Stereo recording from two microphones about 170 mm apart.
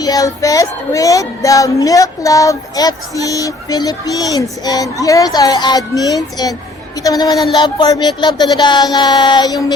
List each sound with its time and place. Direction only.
0.0 s child singing: 20° left (ahead or behind)